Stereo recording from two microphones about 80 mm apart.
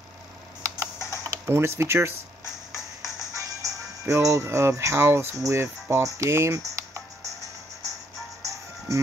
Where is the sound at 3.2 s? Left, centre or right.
Right.